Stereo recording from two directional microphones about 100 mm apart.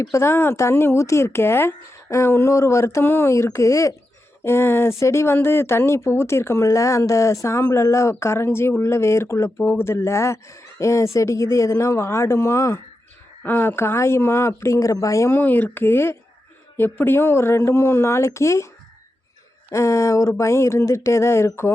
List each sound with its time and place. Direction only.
0.0 s speech: 30° left (ahead or behind)
15.4 s speech: 20° left (ahead or behind)
19.7 s speech: 30° left (ahead or behind)